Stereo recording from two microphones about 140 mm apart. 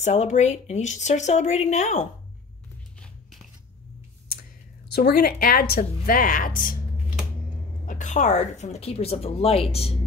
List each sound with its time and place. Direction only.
0.0 s speech: 55° left (ahead or behind)
5.1 s speech: 90° left
7.8 s a woman's voice: 65° left (ahead or behind); by 9.9 s 45° left (ahead or behind)